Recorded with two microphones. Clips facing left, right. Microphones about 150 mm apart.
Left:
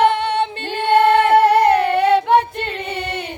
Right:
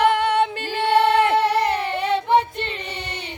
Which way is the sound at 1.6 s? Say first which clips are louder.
Left 8 dB; 60° left (ahead or behind).